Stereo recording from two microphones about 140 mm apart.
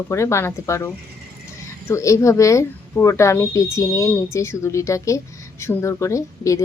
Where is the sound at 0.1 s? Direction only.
20° left (ahead or behind).